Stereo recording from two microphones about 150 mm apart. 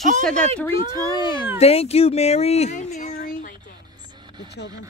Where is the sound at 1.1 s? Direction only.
30° left (ahead or behind).